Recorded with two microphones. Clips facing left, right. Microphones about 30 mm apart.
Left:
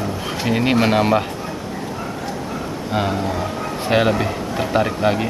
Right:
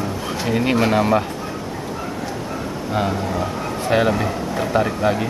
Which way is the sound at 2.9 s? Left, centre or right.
Centre.